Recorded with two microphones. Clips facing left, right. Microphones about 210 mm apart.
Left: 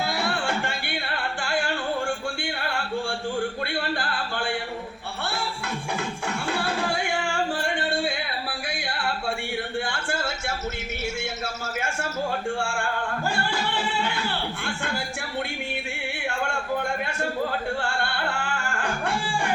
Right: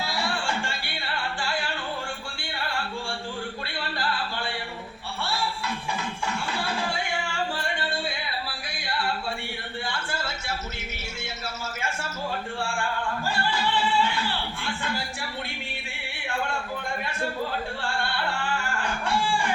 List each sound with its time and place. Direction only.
0.0 s music: 55° left (ahead or behind)
3.8 s a sound: 50° left (ahead or behind)
5.2 s music: 50° left (ahead or behind)
9.9 s a sound: 50° left (ahead or behind)
13.2 s music: 50° left (ahead or behind)
14.6 s speech: 50° left (ahead or behind)
17.8 s music: 50° left (ahead or behind)